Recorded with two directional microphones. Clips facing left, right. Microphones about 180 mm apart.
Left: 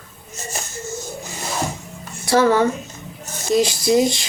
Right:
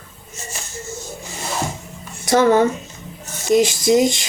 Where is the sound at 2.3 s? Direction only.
20° right (ahead or behind).